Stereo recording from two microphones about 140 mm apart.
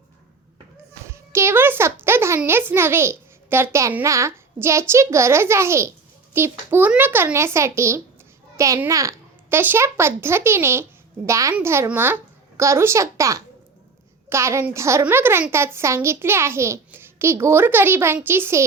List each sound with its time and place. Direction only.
1.1 s music: 20° right (ahead or behind)
2.4 s a child's voice: 15° right (ahead or behind)